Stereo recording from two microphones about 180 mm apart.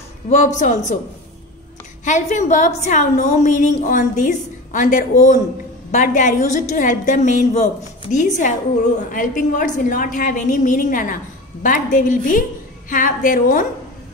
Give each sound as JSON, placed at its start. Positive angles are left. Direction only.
{"t": 0.6, "sound": "a woman's voice", "side_deg": 40}
{"t": 2.0, "sound": "a woman's voice", "side_deg": 40}